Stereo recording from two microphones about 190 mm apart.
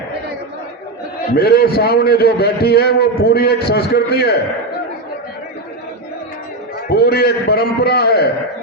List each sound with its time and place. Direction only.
1.4 s a man's voice: 55° left (ahead or behind)
6.8 s a man's voice: 55° left (ahead or behind)